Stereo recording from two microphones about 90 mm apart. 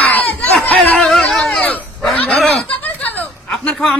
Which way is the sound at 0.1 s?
20° left (ahead or behind).